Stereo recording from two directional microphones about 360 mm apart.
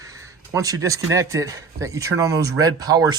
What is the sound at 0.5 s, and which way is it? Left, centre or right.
Speech, centre.